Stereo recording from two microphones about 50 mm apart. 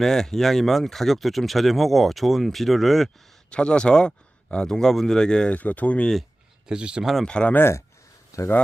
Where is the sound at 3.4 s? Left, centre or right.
Centre.